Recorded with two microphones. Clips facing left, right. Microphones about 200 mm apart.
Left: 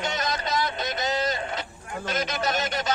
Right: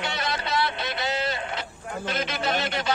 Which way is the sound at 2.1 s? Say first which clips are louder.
Even; 40° left (ahead or behind).